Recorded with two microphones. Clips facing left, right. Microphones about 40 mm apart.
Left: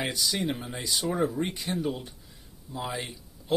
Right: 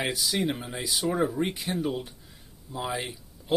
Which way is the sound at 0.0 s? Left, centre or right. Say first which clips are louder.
Right 2 dB; centre.